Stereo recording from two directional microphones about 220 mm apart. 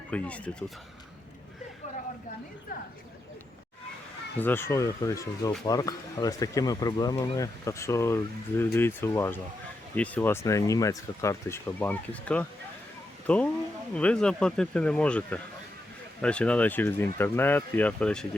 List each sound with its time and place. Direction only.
0.1 s speech: 5° left (ahead or behind)
4.4 s speech: 10° left (ahead or behind)